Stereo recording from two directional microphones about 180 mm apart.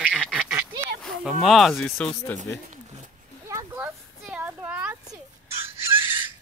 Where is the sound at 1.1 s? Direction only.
Centre (ahead or behind).